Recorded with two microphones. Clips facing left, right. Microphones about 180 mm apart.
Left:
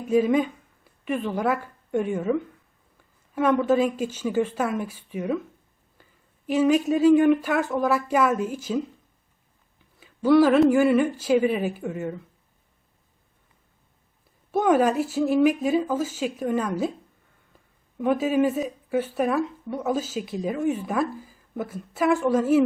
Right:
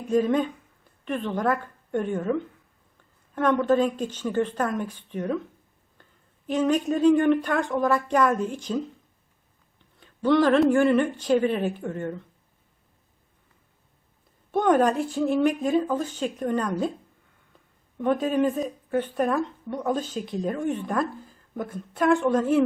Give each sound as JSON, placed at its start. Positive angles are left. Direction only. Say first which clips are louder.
{"t": 0.1, "sound": "a woman's voice", "louder": "left 2 dB", "side_deg": 5}
{"t": 6.0, "sound": "a sound", "louder": "left 1 dB", "side_deg": 5}
{"t": 6.5, "sound": "speech", "louder": "left 3 dB", "side_deg": 5}
{"t": 14.5, "sound": "speech", "louder": "left 1 dB", "side_deg": 5}
{"t": 17.9, "sound": "speech", "louder": "left 1 dB", "side_deg": 5}